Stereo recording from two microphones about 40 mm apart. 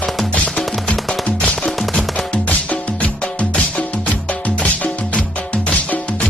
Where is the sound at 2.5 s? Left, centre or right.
Left.